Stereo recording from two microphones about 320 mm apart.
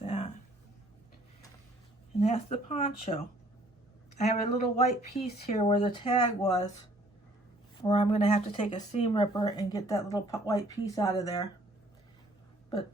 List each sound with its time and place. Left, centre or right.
0.0 s a sound: centre
2.1 s speech: centre
4.2 s speech: left
7.8 s speech: centre